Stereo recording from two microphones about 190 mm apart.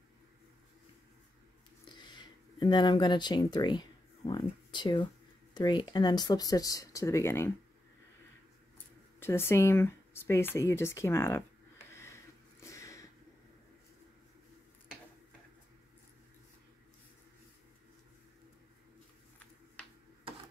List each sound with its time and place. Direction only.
2.0 s speech: 25° left (ahead or behind)
9.2 s speech: 10° left (ahead or behind)
11.9 s a sound: 15° left (ahead or behind)